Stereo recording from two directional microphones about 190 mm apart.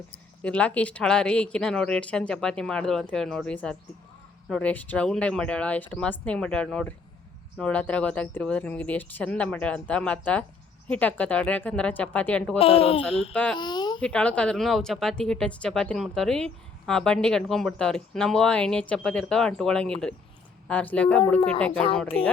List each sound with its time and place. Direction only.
0.4 s speech: 5° left (ahead or behind)
12.5 s speech: 30° left (ahead or behind)
13.3 s speech: 5° left (ahead or behind)
13.6 s a sound: 20° left (ahead or behind)
14.0 s speech: 5° left (ahead or behind)
21.7 s speech: 30° left (ahead or behind)